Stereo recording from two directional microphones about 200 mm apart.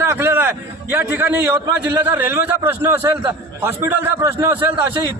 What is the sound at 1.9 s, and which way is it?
A man's voice, 10° right (ahead or behind).